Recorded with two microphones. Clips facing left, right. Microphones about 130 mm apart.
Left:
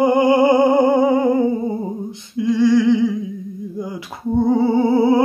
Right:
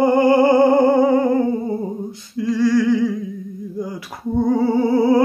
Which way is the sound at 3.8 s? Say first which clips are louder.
Right 2 dB; 20° left (ahead or behind).